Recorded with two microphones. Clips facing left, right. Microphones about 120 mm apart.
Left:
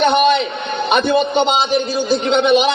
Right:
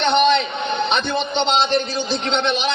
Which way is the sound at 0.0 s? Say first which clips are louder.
Left 3 dB; 5° left (ahead or behind).